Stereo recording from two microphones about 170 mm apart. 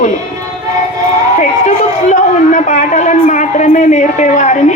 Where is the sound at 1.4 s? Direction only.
45° left (ahead or behind).